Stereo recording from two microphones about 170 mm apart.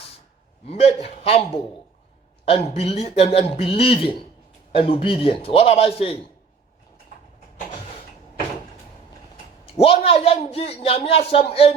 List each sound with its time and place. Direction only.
0.6 s a man's voice: 40° left (ahead or behind)
9.7 s a man's voice: 35° left (ahead or behind)